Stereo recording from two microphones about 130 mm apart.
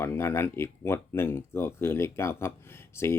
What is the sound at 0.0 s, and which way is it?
Speech, 20° left (ahead or behind).